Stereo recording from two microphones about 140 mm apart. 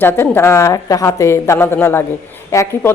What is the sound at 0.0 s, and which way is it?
A woman's voice, 15° left (ahead or behind).